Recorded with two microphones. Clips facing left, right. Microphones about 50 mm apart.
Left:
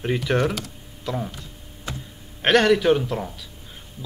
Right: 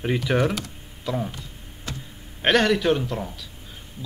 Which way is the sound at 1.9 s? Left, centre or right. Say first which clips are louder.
Left 2 dB; centre.